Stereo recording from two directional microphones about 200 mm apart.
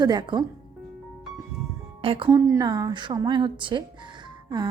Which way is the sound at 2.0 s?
25° right (ahead or behind).